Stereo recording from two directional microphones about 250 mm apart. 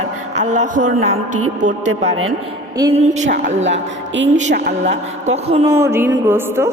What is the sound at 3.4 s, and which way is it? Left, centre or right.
Music, right.